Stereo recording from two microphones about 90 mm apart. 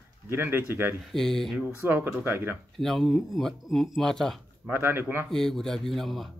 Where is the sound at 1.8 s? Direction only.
20° right (ahead or behind).